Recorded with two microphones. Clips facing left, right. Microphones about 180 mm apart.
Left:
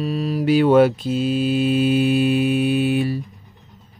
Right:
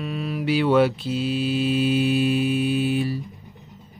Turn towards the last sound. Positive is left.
turn(degrees=60)  # may be behind; listen again after turning